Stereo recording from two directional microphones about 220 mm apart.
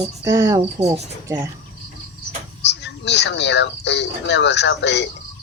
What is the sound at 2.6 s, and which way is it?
Speech, 50° left (ahead or behind).